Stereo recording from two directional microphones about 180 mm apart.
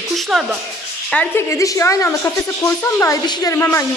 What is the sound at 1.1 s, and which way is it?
A woman's voice, 10° left (ahead or behind).